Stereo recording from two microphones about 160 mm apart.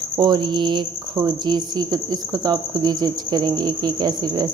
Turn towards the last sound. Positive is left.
turn(degrees=-25)  # may be behind; listen again after turning